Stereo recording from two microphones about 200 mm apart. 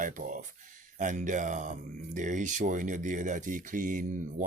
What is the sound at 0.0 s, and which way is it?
Speech, 40° right (ahead or behind).